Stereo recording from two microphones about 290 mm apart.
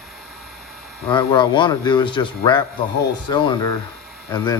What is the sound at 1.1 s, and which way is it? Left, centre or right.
A man's voice, centre.